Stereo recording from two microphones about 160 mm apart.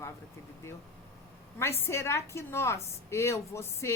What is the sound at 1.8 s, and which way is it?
Speech, 15° left (ahead or behind).